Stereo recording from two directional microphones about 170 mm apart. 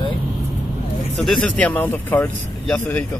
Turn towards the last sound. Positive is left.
turn(degrees=10)  # may be behind; listen again after turning